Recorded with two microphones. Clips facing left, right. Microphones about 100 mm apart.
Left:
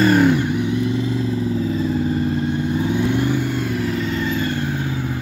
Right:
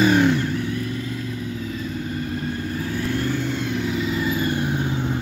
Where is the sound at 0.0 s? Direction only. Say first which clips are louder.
Left 3 dB; centre (ahead or behind).